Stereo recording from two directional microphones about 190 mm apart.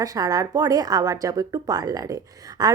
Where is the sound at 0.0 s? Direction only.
20° right (ahead or behind).